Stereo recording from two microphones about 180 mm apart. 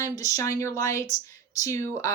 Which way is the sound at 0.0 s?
20° left (ahead or behind).